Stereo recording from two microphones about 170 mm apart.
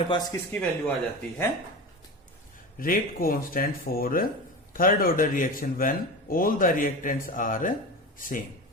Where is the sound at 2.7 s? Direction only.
55° left (ahead or behind).